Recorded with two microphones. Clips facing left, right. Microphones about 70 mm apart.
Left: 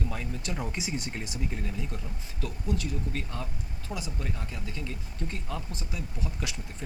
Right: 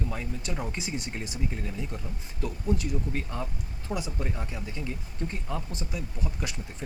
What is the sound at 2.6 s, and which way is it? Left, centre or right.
Speech, right.